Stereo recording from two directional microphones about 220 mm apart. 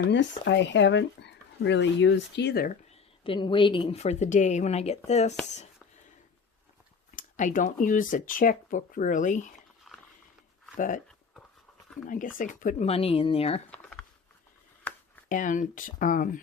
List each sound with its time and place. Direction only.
0.0 s speech: 55° left (ahead or behind)
2.9 s speech: 25° left (ahead or behind)
7.2 s speech: 35° left (ahead or behind)
10.8 s speech: 35° left (ahead or behind)
12.0 s speech: 40° left (ahead or behind)
14.9 s a sound: 5° left (ahead or behind)
15.3 s speech: 35° left (ahead or behind)